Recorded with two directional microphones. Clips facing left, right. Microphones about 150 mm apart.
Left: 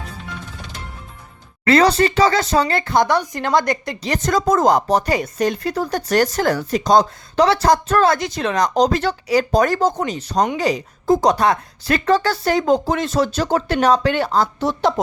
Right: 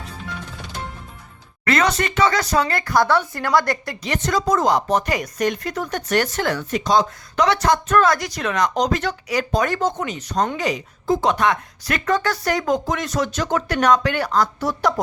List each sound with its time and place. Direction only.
1.6 s speech: 30° left (ahead or behind)
4.0 s speech: 40° left (ahead or behind); by 15.0 s 25° left (ahead or behind)